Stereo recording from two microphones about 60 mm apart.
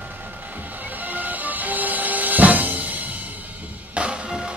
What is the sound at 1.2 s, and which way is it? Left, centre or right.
Music, right.